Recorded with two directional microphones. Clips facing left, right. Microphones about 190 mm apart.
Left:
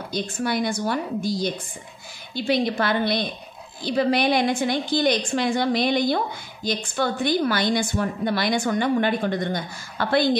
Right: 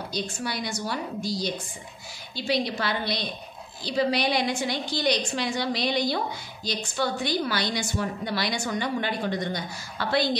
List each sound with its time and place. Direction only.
0.1 s a woman's voice: 50° left (ahead or behind)